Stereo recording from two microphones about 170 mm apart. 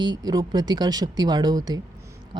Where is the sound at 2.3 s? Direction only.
25° right (ahead or behind).